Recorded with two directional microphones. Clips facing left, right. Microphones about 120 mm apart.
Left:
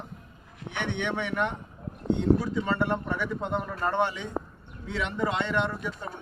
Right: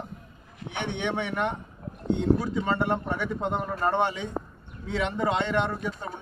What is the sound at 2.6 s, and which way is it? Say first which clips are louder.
A man's voice: right 1 dB; 20° right (ahead or behind).